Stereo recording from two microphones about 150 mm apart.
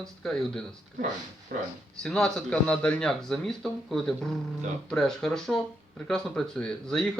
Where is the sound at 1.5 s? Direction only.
75° right (ahead or behind).